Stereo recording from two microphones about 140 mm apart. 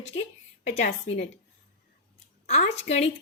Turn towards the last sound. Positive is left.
turn(degrees=55)  # may be behind; listen again after turning